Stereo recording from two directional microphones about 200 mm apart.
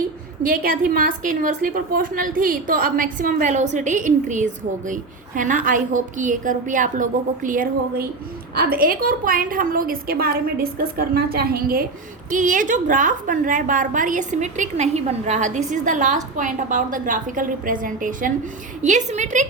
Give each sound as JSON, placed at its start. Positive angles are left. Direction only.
{"t": 0.4, "sound": "a woman's voice", "side_deg": -45}